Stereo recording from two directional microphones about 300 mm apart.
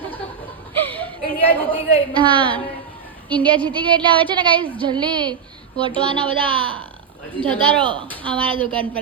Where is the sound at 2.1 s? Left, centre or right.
Centre.